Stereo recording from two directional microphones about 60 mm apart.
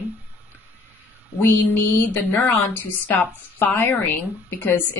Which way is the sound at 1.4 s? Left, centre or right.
Left.